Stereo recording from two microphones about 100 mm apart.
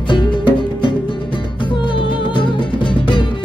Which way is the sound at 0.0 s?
55° left (ahead or behind).